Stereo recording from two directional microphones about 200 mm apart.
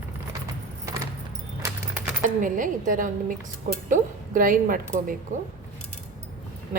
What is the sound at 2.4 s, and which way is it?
A woman's voice, 40° right (ahead or behind).